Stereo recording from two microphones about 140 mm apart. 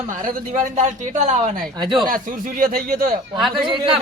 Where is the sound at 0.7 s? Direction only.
55° right (ahead or behind).